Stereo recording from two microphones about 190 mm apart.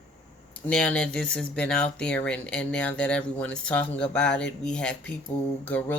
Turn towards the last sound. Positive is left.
turn(degrees=10)  # may be behind; listen again after turning